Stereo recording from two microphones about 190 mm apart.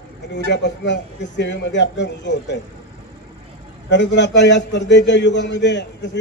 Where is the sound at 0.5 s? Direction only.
65° left (ahead or behind).